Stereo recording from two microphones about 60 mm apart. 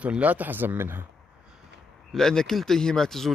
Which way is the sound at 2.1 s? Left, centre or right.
Centre.